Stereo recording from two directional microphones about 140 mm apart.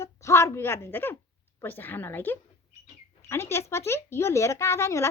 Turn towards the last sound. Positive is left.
turn(degrees=20)  # may be behind; listen again after turning